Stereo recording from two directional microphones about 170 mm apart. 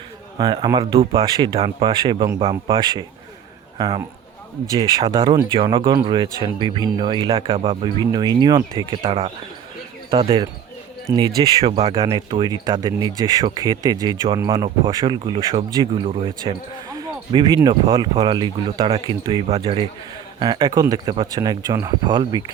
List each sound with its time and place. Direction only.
0.3 s speech: 25° right (ahead or behind)
14.8 s speech: 30° right (ahead or behind)